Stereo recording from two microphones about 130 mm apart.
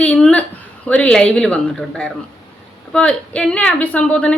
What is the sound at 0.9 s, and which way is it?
A woman's voice, 10° left (ahead or behind).